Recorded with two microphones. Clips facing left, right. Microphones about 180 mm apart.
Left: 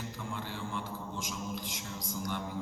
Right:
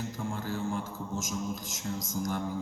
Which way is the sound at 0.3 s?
45° right (ahead or behind).